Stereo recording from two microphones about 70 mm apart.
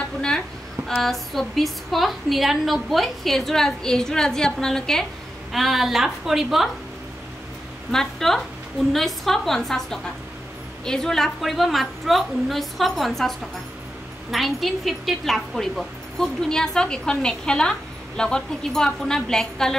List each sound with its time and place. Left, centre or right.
1.0 s a woman's voice: centre
7.9 s a woman's voice: centre